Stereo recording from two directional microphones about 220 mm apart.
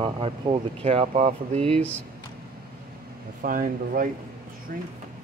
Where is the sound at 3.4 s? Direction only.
40° right (ahead or behind).